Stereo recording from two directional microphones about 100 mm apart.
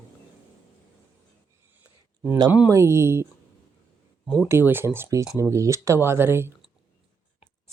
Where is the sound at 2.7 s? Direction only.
30° right (ahead or behind).